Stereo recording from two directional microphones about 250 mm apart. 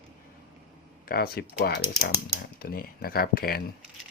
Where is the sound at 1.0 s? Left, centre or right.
Left.